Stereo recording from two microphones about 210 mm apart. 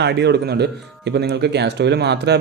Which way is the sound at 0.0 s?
55° right (ahead or behind).